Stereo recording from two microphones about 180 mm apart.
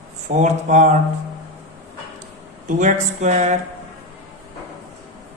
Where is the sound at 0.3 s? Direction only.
40° right (ahead or behind).